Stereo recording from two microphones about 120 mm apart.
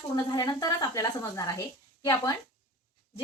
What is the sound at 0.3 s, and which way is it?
A woman's voice, 35° left (ahead or behind).